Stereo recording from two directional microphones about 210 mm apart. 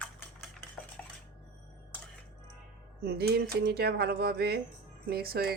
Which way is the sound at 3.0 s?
50° right (ahead or behind).